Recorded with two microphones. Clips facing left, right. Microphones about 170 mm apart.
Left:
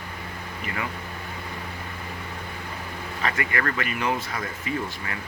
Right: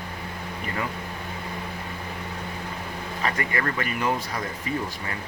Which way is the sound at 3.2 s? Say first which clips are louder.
Even; 35° right (ahead or behind).